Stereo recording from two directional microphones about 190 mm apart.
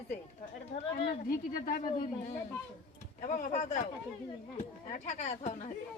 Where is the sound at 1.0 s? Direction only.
50° left (ahead or behind).